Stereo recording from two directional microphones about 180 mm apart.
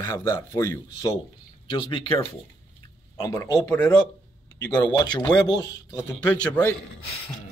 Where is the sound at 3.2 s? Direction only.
20° left (ahead or behind).